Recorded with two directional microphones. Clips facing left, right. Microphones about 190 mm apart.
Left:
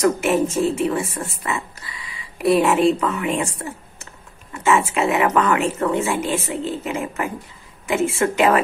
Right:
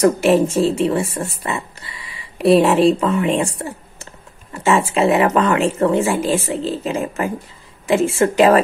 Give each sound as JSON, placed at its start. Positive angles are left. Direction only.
{"t": 0.0, "sound": "speech", "side_deg": -30}